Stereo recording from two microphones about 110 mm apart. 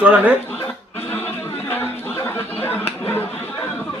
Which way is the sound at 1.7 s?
20° left (ahead or behind).